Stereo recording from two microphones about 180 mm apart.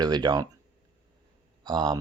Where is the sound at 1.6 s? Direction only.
25° right (ahead or behind).